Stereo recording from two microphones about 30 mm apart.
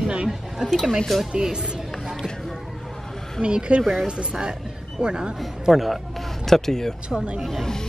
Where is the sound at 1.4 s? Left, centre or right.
Right.